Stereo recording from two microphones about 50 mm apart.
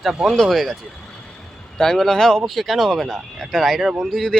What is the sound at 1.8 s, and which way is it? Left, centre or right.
Speech, centre.